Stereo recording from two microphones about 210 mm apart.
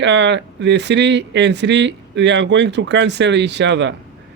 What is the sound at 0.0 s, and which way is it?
Speech, 60° right (ahead or behind).